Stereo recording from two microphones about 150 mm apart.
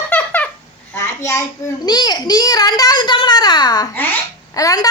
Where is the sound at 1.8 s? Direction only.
30° left (ahead or behind).